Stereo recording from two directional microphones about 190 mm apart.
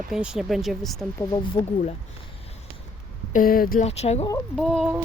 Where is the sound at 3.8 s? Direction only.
35° left (ahead or behind).